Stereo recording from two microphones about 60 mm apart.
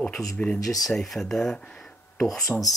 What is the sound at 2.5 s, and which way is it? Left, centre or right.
Speech, centre.